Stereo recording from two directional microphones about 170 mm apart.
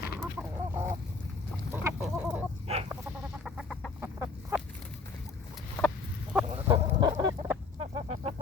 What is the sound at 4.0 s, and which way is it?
Chicken, 15° right (ahead or behind).